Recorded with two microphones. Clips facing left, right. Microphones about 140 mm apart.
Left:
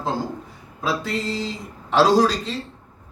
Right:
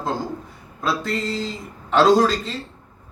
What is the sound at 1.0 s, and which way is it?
A man's voice, centre (ahead or behind).